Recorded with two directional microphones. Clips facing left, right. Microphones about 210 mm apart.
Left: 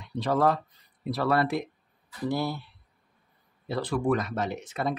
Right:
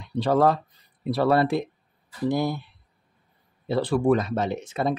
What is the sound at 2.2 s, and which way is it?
Speech, 15° right (ahead or behind).